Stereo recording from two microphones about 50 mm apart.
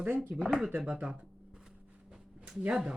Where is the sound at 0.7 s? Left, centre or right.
Right.